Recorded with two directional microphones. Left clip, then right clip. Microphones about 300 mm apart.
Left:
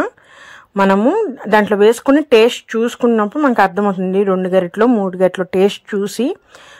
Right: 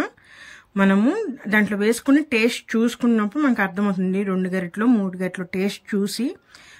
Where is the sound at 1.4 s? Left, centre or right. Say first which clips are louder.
Left 8 dB; left.